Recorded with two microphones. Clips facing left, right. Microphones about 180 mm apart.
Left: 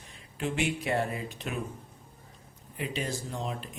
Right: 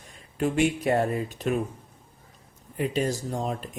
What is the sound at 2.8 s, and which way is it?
Speech, 45° right (ahead or behind).